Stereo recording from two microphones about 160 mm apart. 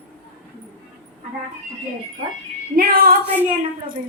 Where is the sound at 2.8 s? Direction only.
65° right (ahead or behind).